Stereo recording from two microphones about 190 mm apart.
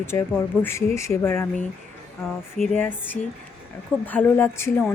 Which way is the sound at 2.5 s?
5° left (ahead or behind).